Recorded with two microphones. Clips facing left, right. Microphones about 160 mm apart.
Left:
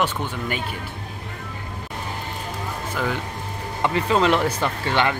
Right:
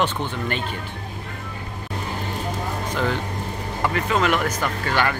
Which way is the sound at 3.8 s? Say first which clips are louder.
Left 2 dB; 30° left (ahead or behind).